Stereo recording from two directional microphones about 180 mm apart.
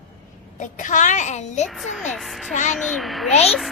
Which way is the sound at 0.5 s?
45° left (ahead or behind).